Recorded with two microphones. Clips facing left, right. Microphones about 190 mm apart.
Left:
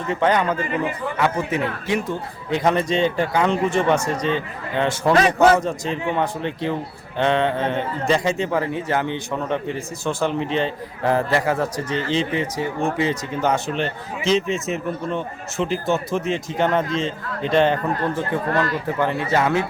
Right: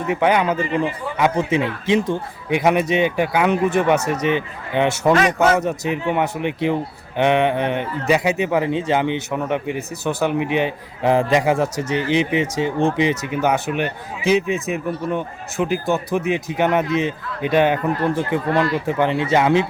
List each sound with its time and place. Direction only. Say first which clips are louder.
0.1 s a man's voice: right 2 dB; 10° right (ahead or behind)
3.9 s speech: right 2 dB; 65° right (ahead or behind)
4.3 s a man's voice: right 2 dB; 15° right (ahead or behind)